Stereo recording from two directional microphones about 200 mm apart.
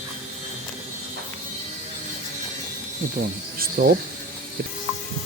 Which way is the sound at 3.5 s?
45° right (ahead or behind).